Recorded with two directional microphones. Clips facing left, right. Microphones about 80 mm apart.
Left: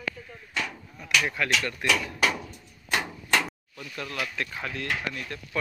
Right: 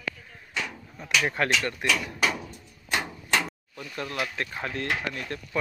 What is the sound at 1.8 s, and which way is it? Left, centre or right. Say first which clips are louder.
Speech: left 2 dB; right.